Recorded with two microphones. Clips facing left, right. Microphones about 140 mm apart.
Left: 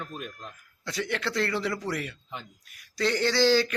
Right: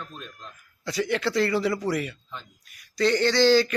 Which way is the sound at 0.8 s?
Centre (ahead or behind).